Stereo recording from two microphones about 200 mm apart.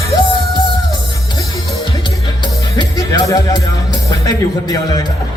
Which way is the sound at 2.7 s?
15° left (ahead or behind).